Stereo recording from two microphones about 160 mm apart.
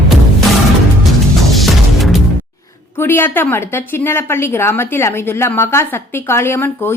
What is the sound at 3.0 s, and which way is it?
A woman's voice, 15° left (ahead or behind).